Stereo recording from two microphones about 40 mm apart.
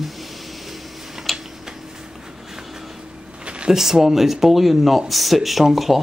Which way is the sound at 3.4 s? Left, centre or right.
Right.